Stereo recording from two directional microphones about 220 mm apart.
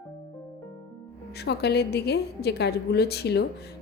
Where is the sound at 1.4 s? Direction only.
50° left (ahead or behind).